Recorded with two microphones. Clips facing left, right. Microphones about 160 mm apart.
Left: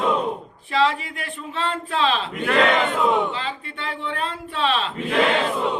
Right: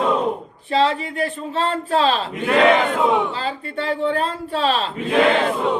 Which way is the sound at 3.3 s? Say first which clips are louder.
Right 3 dB; 35° right (ahead or behind).